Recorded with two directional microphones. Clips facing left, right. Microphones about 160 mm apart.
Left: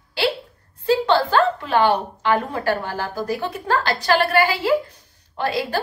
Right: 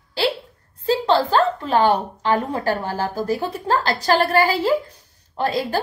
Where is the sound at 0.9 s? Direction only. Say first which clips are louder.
Even; 35° right (ahead or behind).